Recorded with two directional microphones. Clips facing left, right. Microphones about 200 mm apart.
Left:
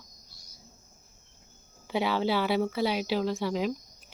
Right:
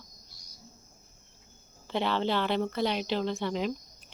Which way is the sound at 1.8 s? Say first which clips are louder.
Left 1 dB; 10° left (ahead or behind).